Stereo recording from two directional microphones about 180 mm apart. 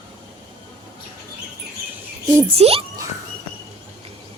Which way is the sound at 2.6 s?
35° right (ahead or behind).